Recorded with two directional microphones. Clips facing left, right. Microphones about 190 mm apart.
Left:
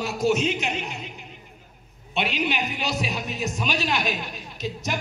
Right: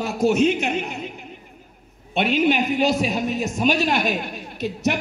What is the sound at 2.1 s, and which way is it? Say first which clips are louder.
A man's voice: right 7 dB; 50° right (ahead or behind).